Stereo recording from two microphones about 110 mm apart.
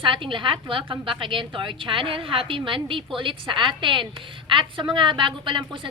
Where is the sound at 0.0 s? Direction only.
50° right (ahead or behind).